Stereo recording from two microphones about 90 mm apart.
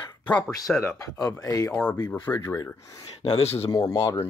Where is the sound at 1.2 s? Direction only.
40° left (ahead or behind).